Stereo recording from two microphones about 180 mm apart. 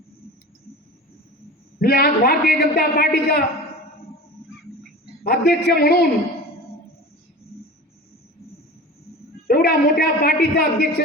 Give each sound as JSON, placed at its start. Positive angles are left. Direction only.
{"t": 1.8, "sound": "a man's voice", "side_deg": 60}
{"t": 5.2, "sound": "a man's voice", "side_deg": 60}
{"t": 9.5, "sound": "a man's voice", "side_deg": 60}